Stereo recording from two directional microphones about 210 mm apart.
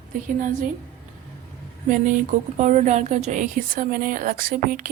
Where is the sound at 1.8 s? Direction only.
40° right (ahead or behind).